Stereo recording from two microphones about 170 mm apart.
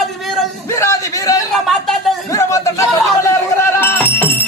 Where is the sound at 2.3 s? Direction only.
20° left (ahead or behind).